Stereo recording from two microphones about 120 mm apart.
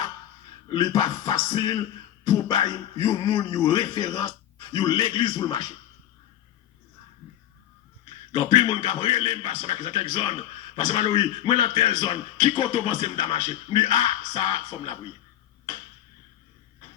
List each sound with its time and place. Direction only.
0.7 s a man's voice: 35° left (ahead or behind)
8.3 s a man's voice: 40° left (ahead or behind)